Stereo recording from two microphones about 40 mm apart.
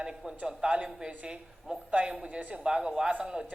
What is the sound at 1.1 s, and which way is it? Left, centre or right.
A woman's voice, right.